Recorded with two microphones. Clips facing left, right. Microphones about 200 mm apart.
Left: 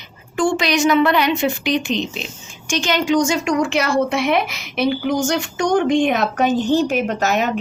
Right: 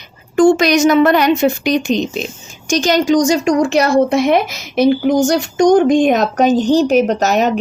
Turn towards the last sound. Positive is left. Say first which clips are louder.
# right 6 dB
turn(degrees=-40)  # may be behind; listen again after turning